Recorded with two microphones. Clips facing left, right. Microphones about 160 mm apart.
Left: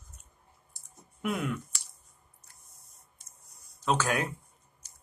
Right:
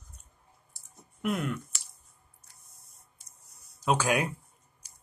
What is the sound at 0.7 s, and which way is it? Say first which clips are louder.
Clicking: even; centre (ahead or behind).